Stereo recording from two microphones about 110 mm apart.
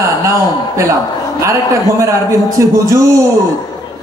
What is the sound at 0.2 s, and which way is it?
A man's voice, 25° right (ahead or behind).